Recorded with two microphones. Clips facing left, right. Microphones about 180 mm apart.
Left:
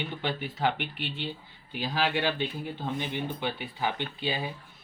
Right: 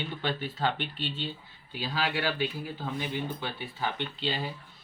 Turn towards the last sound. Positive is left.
turn(degrees=15)  # may be behind; listen again after turning